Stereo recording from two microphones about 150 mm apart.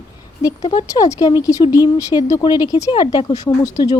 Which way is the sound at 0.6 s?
40° left (ahead or behind).